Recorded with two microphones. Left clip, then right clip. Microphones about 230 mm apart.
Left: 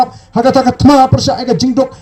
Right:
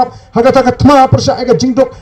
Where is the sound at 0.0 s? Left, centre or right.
Right.